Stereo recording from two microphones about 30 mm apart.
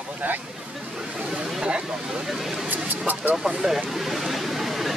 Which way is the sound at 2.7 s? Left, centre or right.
Right.